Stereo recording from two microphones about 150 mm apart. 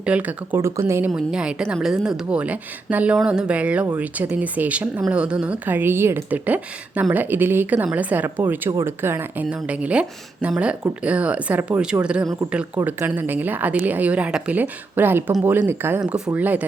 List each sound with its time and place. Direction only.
0.0 s speech: 10° right (ahead or behind)
1.1 s speech: 5° right (ahead or behind)